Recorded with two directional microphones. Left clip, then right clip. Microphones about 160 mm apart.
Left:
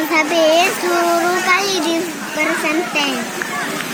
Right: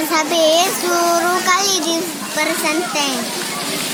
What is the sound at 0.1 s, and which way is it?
Speech, 20° right (ahead or behind).